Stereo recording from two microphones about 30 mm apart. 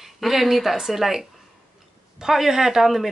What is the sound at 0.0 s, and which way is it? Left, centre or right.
Speech, centre.